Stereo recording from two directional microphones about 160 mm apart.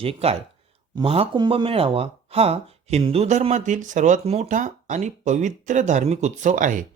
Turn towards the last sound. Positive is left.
turn(degrees=-55)  # may be behind; listen again after turning